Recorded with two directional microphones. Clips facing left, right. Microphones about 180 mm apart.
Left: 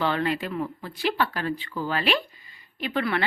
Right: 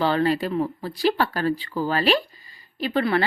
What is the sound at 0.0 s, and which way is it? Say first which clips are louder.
A woman's voice: right 4 dB; 35° right (ahead or behind).